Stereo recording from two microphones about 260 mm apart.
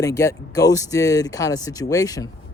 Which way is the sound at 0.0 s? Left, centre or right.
Centre.